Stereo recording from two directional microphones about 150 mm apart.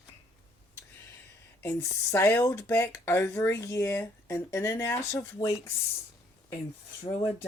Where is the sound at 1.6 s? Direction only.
15° left (ahead or behind).